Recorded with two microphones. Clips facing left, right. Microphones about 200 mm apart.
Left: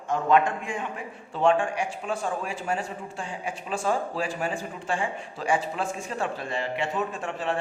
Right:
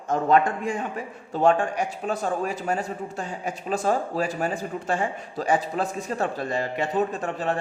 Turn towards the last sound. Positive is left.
turn(degrees=-40)  # may be behind; listen again after turning